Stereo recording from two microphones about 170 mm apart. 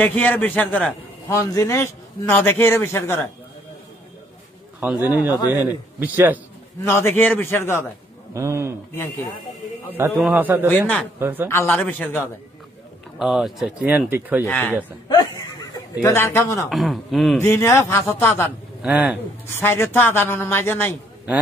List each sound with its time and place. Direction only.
0.0 s a man's voice: 10° left (ahead or behind)
4.7 s speech: 10° right (ahead or behind)
6.8 s a man's voice: 15° left (ahead or behind)
8.3 s a man's voice: 15° right (ahead or behind)
10.1 s speech: 5° right (ahead or behind)
10.7 s a man's voice: 10° left (ahead or behind)
11.1 s speech: 10° right (ahead or behind)
11.4 s a man's voice: 15° left (ahead or behind)
13.2 s speech: centre (ahead or behind)
15.7 s a man's voice: 20° left (ahead or behind)
16.6 s a man's voice: centre (ahead or behind)
17.4 s a man's voice: 15° left (ahead or behind)
18.8 s speech: 5° right (ahead or behind)
19.5 s a man's voice: 15° left (ahead or behind)